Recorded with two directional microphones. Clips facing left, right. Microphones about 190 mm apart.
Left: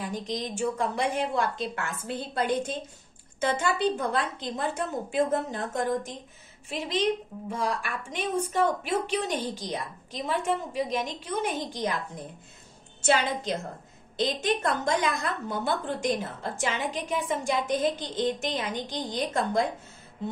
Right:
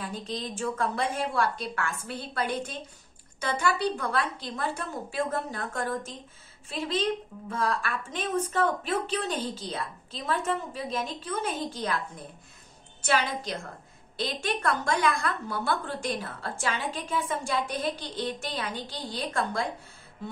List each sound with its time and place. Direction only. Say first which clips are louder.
0.0 s a woman's voice: left 2 dB; 15° left (ahead or behind)
13.0 s a woman's voice: left 3 dB; 25° left (ahead or behind)